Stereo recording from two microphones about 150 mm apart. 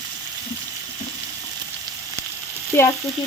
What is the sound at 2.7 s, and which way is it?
Frying, 15° left (ahead or behind).